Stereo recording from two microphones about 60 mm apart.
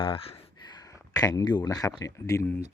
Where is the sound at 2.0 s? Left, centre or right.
Left.